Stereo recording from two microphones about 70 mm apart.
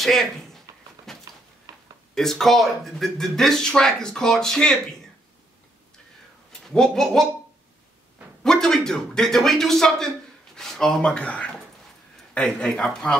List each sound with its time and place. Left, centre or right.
0.0 s speech: centre
1.1 s a sound: centre
1.7 s a sound: right
2.1 s speech: centre
6.7 s a man's voice: centre
8.5 s a man's voice: centre
11.0 s a man's voice: centre